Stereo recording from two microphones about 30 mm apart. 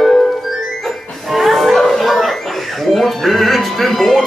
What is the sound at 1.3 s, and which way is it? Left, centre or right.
Music, centre.